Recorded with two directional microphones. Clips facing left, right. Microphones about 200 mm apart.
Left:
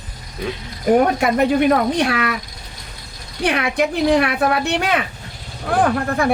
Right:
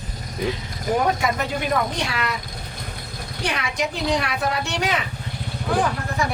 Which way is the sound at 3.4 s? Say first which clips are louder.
Left 7 dB; 55° left (ahead or behind).